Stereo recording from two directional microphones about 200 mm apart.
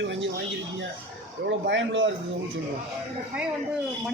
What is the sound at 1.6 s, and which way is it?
Speech, 65° right (ahead or behind).